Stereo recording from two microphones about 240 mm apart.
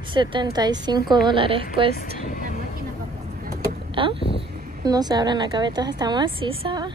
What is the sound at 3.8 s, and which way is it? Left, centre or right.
Vehicle, right.